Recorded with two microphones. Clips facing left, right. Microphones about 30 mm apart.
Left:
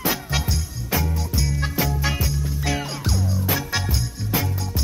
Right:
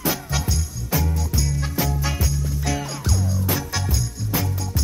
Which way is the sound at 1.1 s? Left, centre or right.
Left.